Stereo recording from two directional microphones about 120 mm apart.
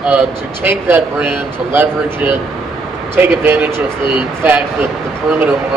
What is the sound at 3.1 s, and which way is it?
Speech, 15° right (ahead or behind).